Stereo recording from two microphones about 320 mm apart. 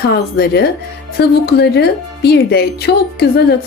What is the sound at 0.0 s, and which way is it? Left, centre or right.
A woman's voice, left.